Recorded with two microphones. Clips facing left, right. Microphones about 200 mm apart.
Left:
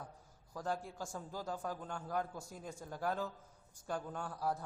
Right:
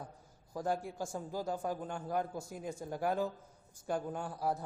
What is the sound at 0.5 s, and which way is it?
A man's voice, 10° right (ahead or behind).